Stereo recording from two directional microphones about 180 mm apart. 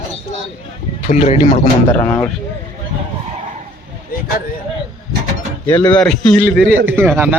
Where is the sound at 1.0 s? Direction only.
40° left (ahead or behind).